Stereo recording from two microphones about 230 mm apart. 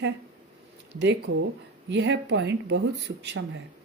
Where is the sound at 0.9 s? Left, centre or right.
Right.